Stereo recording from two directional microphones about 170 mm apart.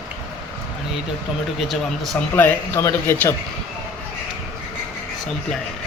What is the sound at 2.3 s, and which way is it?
Speech, 15° left (ahead or behind).